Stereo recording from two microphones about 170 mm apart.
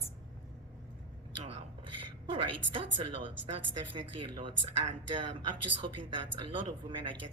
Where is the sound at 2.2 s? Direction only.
30° right (ahead or behind).